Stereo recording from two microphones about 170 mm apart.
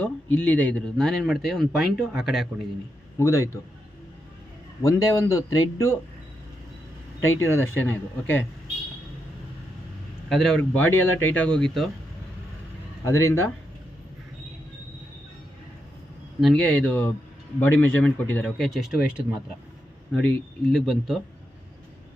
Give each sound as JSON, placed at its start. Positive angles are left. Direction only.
{"t": 0.0, "sound": "speech", "side_deg": 10}
{"t": 3.2, "sound": "speech", "side_deg": 15}
{"t": 4.8, "sound": "a man's voice", "side_deg": 20}
{"t": 7.2, "sound": "speech", "side_deg": 15}
{"t": 10.2, "sound": "speech", "side_deg": 0}
{"t": 13.1, "sound": "speech", "side_deg": 15}
{"t": 16.4, "sound": "speech", "side_deg": 5}
{"t": 20.7, "sound": "speech", "side_deg": 0}